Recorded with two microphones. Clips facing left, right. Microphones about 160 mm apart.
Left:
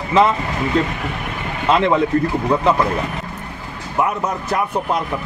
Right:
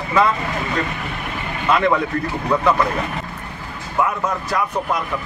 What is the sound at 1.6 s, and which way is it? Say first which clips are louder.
Speech: left 2 dB; 25° left (ahead or behind).